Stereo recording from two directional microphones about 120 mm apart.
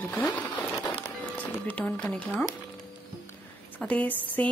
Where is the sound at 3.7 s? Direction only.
10° left (ahead or behind).